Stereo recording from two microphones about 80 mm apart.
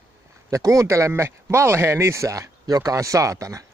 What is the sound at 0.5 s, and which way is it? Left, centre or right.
Speech, right.